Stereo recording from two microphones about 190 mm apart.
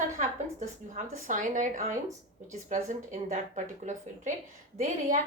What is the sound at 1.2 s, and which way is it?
A woman's voice, 45° right (ahead or behind).